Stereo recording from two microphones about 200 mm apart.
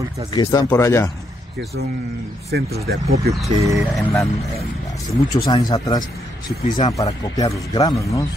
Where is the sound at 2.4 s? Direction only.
50° right (ahead or behind).